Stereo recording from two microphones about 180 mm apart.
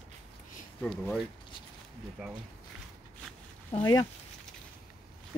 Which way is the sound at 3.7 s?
20° left (ahead or behind).